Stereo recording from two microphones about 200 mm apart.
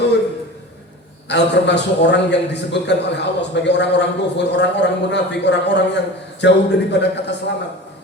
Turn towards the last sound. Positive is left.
turn(degrees=60)  # may be behind; listen again after turning